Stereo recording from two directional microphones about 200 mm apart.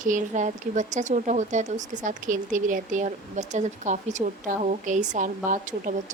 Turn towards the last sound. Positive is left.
turn(degrees=-40)  # may be behind; listen again after turning